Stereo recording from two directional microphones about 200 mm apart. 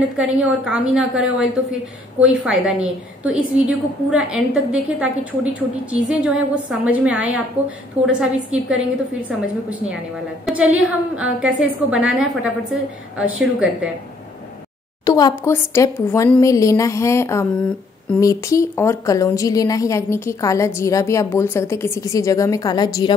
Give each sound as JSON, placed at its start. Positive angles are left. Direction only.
{"t": 0.2, "sound": "a woman's voice", "side_deg": -5}
{"t": 10.4, "sound": "a woman's voice", "side_deg": -5}
{"t": 15.0, "sound": "a woman's voice", "side_deg": 20}